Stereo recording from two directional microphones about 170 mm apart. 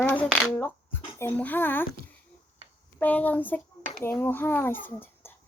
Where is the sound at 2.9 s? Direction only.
10° left (ahead or behind).